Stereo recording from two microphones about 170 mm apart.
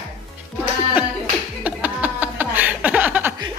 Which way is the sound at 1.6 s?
10° right (ahead or behind).